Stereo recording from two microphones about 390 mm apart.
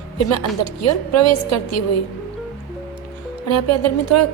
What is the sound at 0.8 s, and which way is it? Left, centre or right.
A woman's voice, left.